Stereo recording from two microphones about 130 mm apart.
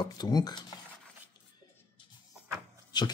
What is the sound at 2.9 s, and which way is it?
Speech, 35° left (ahead or behind).